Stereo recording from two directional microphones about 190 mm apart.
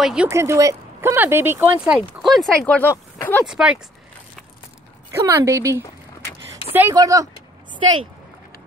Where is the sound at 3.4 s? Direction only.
5° right (ahead or behind).